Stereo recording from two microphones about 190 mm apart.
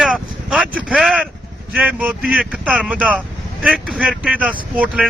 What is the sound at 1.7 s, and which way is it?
Speech, 10° right (ahead or behind).